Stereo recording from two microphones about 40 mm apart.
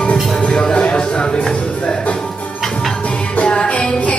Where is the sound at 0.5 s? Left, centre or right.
Left.